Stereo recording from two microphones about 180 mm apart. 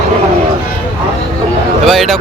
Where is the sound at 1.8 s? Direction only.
Centre (ahead or behind).